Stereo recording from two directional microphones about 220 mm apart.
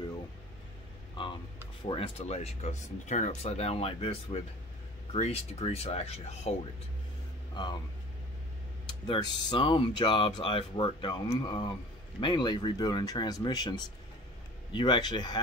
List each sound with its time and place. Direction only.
1.9 s speech: 25° left (ahead or behind)
9.0 s speech: 20° left (ahead or behind)